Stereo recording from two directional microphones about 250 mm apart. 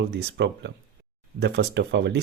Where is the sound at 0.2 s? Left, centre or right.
Right.